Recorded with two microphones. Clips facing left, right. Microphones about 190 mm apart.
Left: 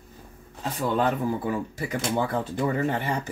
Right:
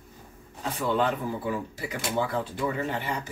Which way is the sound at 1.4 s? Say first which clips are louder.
Left 3 dB; 50° left (ahead or behind).